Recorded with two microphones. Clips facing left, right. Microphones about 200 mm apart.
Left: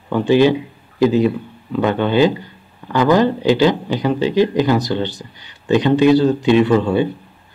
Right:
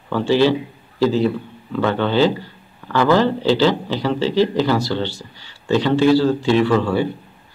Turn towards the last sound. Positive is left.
turn(degrees=20)  # may be behind; listen again after turning